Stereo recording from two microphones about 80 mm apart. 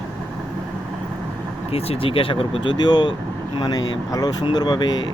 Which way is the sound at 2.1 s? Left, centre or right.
Left.